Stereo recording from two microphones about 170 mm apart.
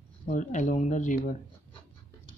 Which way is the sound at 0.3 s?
45° left (ahead or behind).